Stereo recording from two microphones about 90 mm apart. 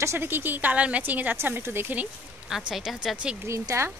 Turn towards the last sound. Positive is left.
turn(degrees=-30)  # may be behind; listen again after turning